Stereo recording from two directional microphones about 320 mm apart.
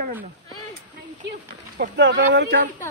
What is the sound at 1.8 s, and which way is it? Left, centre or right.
Speech, right.